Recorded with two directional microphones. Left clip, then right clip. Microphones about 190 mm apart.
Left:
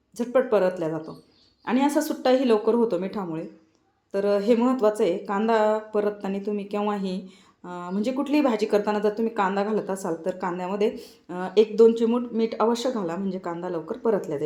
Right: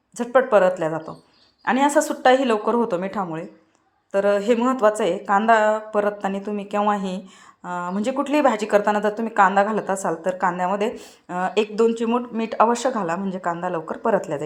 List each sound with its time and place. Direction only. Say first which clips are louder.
0.2 s speech: right 5 dB; 15° right (ahead or behind)